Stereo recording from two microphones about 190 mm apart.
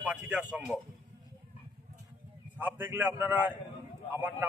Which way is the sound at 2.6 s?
10° right (ahead or behind).